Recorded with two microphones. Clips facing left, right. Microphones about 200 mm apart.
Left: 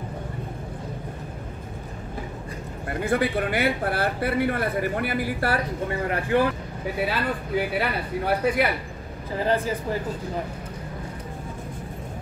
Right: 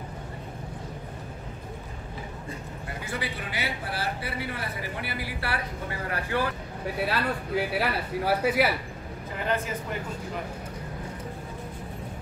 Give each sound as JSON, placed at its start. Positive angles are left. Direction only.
{"t": 2.9, "sound": "speech", "side_deg": 55}
{"t": 5.9, "sound": "speech", "side_deg": 25}
{"t": 7.0, "sound": "speech", "side_deg": 0}
{"t": 9.4, "sound": "speech", "side_deg": 35}